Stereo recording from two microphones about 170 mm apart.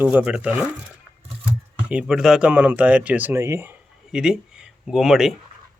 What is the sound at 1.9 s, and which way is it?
Speech, 5° right (ahead or behind).